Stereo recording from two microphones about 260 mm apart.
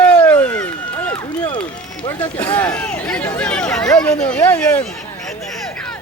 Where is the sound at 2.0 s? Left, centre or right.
Centre.